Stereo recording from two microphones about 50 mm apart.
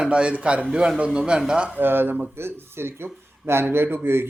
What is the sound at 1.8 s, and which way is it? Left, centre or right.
Speech, right.